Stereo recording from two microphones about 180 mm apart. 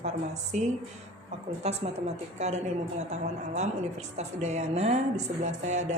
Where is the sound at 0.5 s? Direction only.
40° right (ahead or behind).